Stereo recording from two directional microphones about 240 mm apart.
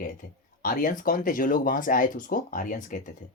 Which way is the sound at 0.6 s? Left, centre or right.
Left.